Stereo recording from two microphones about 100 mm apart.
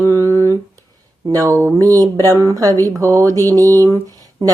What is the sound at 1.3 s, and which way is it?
Speech, 30° right (ahead or behind).